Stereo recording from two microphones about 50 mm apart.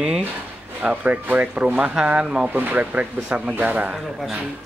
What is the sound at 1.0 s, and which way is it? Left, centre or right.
Speech, right.